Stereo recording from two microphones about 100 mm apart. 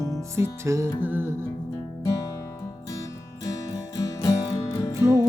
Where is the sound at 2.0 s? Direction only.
35° left (ahead or behind).